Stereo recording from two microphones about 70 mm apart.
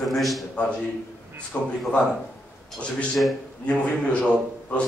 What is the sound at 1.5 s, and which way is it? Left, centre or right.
Speech, left.